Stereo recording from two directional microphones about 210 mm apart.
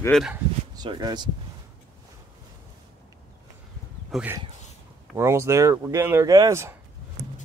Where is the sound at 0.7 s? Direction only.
20° right (ahead or behind).